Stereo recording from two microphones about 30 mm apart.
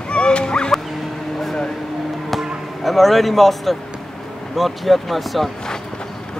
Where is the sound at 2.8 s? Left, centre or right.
Centre.